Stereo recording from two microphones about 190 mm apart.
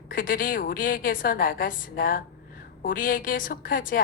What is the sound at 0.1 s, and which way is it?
Speech, 50° left (ahead or behind).